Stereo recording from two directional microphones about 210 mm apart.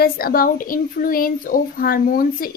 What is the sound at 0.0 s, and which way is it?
A woman's voice, 45° left (ahead or behind).